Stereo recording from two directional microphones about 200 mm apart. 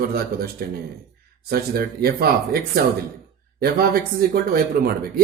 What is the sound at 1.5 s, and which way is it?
Speech, 50° right (ahead or behind).